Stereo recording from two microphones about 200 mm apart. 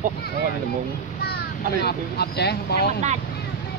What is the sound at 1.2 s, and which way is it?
Speech, 55° left (ahead or behind).